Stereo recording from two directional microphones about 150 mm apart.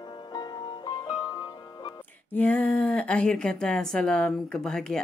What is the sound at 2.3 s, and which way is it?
Speech, 10° left (ahead or behind).